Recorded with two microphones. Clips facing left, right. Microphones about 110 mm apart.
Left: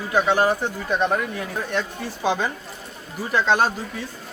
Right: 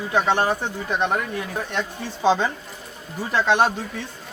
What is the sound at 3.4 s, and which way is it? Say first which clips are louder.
Speech: right 1 dB; centre (ahead or behind).